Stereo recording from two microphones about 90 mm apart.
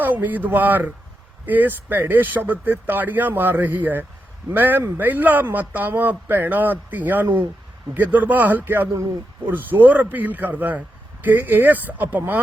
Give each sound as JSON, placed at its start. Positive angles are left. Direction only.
{"t": 0.0, "sound": "a man's voice", "side_deg": -20}